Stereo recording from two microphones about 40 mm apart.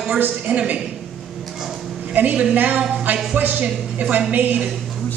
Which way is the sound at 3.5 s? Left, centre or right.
Right.